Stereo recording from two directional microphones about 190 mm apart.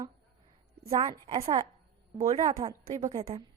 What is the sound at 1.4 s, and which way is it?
A woman's voice, 35° right (ahead or behind).